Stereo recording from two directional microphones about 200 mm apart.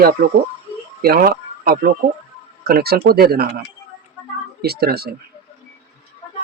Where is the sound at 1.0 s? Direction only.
50° right (ahead or behind).